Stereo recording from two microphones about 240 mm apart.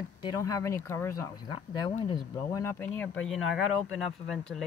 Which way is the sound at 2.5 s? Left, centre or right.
Centre.